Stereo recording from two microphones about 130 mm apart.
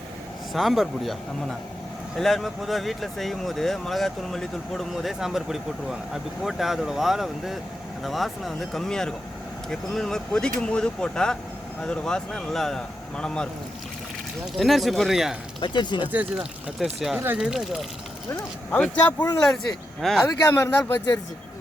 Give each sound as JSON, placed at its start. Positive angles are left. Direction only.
{"t": 0.5, "sound": "speech", "side_deg": 0}
{"t": 14.5, "sound": "speech", "side_deg": 0}
{"t": 15.6, "sound": "speech", "side_deg": 35}
{"t": 16.1, "sound": "speech", "side_deg": -10}
{"t": 18.7, "sound": "speech", "side_deg": 10}
{"t": 20.5, "sound": "speech", "side_deg": 15}